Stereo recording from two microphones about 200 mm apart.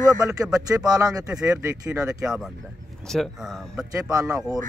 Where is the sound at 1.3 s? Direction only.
5° right (ahead or behind).